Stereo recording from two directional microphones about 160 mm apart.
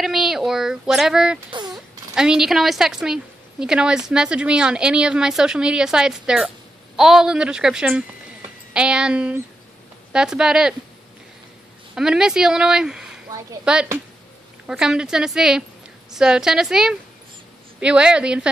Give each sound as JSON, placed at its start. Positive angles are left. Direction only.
{"t": 0.0, "sound": "speech", "side_deg": 0}
{"t": 1.5, "sound": "a sound", "side_deg": -25}
{"t": 2.1, "sound": "a woman's voice", "side_deg": -5}
{"t": 11.9, "sound": "a woman's voice", "side_deg": -5}